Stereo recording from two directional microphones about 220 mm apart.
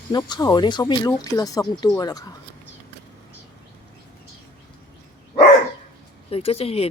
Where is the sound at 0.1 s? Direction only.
20° left (ahead or behind).